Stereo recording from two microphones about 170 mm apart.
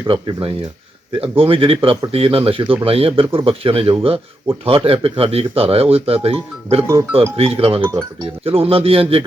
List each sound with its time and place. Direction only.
0.1 s speech: 30° right (ahead or behind)